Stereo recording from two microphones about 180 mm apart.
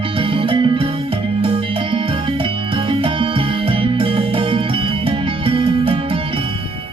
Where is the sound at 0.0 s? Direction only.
30° right (ahead or behind).